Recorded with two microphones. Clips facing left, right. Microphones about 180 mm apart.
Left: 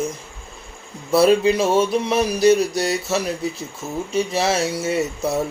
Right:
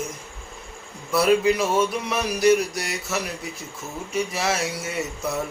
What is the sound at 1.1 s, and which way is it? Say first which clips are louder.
Mantra: left 4 dB; 30° left (ahead or behind).